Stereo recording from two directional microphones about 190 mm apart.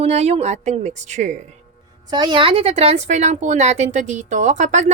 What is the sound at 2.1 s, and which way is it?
A woman's voice, 25° right (ahead or behind).